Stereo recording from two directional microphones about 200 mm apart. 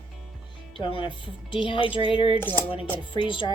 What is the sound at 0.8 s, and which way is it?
A woman's voice, 25° left (ahead or behind).